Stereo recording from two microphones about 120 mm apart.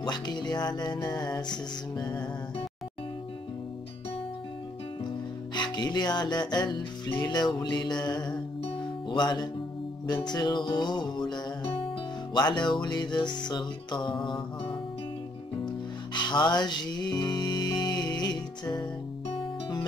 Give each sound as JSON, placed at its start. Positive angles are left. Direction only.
{"t": 0.0, "sound": "music", "side_deg": 35}
{"t": 5.0, "sound": "music", "side_deg": 40}